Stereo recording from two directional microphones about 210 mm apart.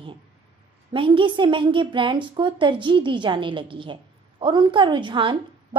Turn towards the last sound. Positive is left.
turn(degrees=-25)  # may be behind; listen again after turning